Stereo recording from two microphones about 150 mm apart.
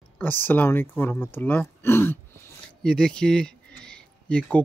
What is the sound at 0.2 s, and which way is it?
A man's voice, 15° left (ahead or behind).